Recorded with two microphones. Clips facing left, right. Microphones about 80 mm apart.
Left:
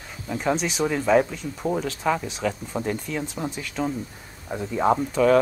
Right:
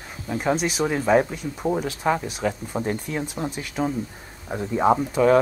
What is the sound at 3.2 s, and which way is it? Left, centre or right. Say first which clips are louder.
Speech: right 1 dB; centre.